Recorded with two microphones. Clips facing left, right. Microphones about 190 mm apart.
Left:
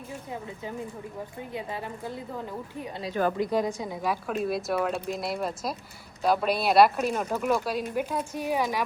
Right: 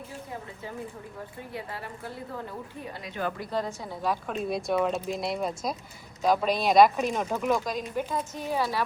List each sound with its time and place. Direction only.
1.5 s speech: 20° left (ahead or behind)
3.0 s a woman's voice: 40° left (ahead or behind)
3.3 s a woman's voice: 15° left (ahead or behind)